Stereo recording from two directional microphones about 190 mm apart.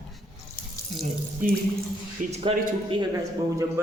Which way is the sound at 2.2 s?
45° right (ahead or behind).